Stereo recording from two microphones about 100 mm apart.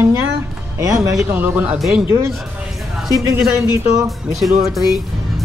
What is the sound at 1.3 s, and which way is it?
Speech, 15° right (ahead or behind).